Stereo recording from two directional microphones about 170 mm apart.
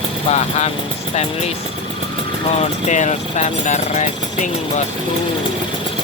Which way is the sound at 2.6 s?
45° left (ahead or behind).